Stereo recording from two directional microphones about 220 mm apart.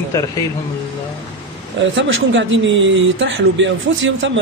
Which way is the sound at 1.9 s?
55° right (ahead or behind).